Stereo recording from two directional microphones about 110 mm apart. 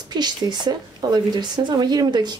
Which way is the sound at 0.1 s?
40° right (ahead or behind).